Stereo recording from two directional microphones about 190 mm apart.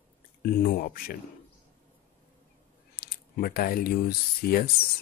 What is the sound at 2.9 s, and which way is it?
Speech, 55° left (ahead or behind).